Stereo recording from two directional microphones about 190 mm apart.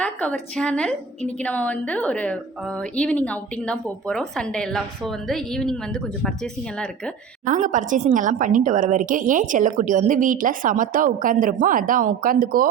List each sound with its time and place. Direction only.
0.0 s a woman's voice: 5° left (ahead or behind)
7.4 s a woman's voice: 40° right (ahead or behind)